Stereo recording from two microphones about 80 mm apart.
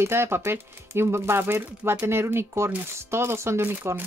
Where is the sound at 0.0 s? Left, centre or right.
Right.